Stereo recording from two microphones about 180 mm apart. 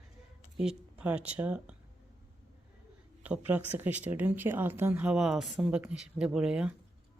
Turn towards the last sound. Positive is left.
turn(degrees=-5)  # may be behind; listen again after turning